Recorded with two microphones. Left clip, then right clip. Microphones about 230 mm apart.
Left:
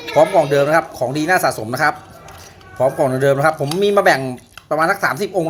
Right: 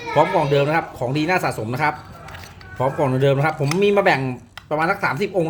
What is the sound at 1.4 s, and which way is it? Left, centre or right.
Speech, right.